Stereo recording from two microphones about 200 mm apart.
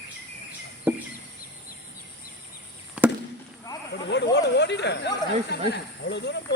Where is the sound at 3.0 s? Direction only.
5° right (ahead or behind).